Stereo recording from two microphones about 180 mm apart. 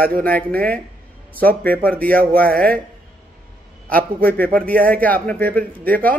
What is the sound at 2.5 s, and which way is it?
Speech, 50° right (ahead or behind).